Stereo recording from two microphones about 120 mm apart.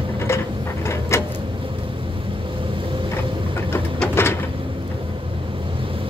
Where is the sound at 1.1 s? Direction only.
25° left (ahead or behind).